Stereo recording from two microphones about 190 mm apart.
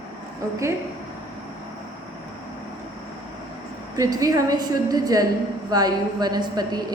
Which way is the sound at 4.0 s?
20° right (ahead or behind).